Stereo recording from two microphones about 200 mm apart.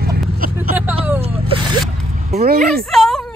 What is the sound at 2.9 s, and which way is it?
Speech, centre (ahead or behind).